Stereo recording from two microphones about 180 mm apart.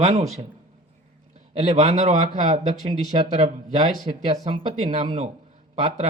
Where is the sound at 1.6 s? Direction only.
30° right (ahead or behind).